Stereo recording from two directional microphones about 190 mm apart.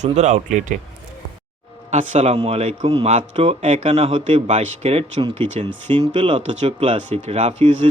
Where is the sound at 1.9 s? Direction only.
35° right (ahead or behind).